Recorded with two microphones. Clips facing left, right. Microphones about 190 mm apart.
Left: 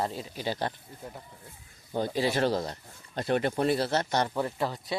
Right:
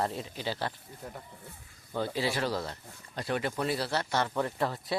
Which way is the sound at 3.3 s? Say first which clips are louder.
Left 5 dB; 50° left (ahead or behind).